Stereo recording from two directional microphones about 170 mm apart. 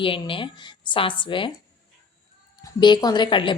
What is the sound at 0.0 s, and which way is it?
A woman's voice, 30° left (ahead or behind).